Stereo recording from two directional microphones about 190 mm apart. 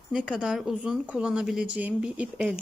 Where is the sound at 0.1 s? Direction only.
5° right (ahead or behind).